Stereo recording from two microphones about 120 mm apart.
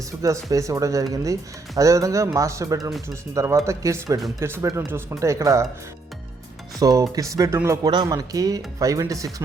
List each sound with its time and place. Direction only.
0.2 s speech: 25° right (ahead or behind)
6.7 s speech: 30° right (ahead or behind)
7.9 s speech: 35° right (ahead or behind)